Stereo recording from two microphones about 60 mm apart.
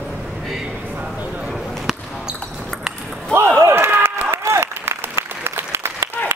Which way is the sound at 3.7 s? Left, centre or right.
Right.